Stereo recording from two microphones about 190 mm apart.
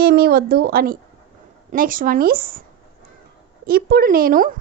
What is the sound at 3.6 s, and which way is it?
Speech, 50° right (ahead or behind).